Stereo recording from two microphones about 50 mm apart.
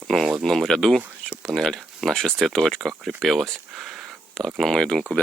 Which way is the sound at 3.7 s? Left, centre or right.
Centre.